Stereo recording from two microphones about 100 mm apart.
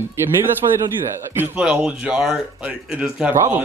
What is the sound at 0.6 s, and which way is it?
Speech, 45° right (ahead or behind).